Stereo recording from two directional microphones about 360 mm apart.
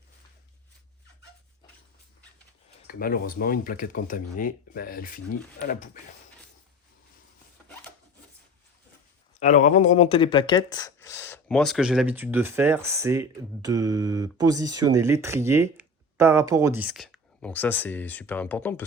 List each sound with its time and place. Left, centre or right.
2.8 s speech: left
9.4 s speech: left